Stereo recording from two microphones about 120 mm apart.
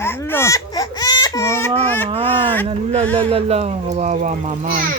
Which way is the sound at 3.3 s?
55° right (ahead or behind).